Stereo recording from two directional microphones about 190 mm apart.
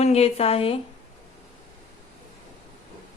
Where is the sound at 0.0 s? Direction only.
35° left (ahead or behind).